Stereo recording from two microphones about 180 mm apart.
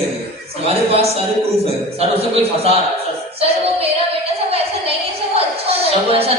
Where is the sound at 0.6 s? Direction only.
35° right (ahead or behind).